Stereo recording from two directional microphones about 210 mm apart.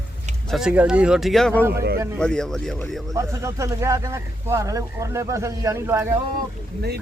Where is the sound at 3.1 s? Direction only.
15° right (ahead or behind).